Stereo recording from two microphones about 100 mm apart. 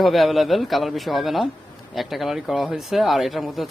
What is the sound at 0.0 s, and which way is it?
Speech, centre (ahead or behind).